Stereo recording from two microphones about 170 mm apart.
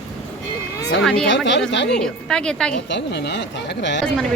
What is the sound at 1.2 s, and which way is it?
Speech, 90° left.